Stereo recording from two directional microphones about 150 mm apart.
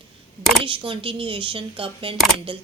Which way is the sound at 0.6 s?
35° right (ahead or behind).